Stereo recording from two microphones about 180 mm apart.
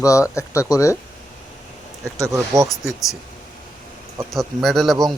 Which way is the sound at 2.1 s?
20° right (ahead or behind).